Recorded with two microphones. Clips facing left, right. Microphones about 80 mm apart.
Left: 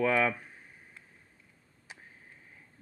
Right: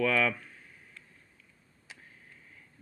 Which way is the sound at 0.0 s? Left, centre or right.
Left.